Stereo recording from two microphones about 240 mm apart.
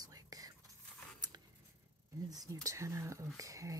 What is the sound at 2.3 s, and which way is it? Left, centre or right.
Speech, centre.